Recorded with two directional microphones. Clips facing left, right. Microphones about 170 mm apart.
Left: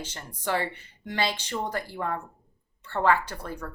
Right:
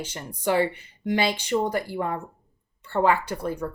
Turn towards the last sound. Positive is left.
turn(degrees=-15)  # may be behind; listen again after turning